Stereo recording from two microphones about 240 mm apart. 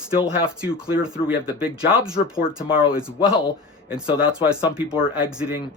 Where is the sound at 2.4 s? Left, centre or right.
Left.